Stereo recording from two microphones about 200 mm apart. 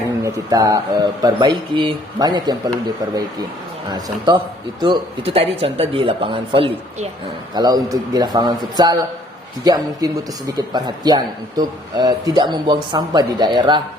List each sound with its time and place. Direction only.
0.2 s a man's voice: 15° right (ahead or behind)
4.8 s a man's voice: 25° right (ahead or behind)